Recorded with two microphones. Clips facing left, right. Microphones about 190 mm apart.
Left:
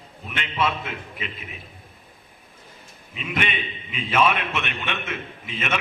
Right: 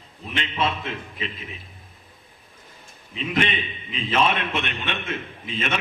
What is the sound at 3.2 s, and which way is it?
A man's voice, 30° right (ahead or behind).